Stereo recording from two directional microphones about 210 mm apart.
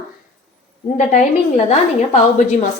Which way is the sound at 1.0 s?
35° left (ahead or behind).